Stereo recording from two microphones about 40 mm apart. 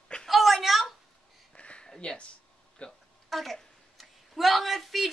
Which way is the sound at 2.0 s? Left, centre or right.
Left.